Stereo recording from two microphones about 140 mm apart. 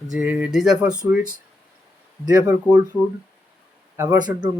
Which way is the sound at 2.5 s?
10° right (ahead or behind).